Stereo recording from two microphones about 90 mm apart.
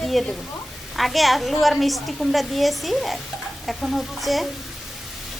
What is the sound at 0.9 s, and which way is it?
Sizzle, centre (ahead or behind).